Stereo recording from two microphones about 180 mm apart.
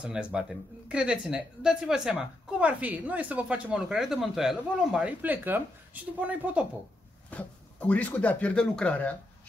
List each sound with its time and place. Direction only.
0.0 s speech: 5° right (ahead or behind)
7.2 s speech: 10° left (ahead or behind)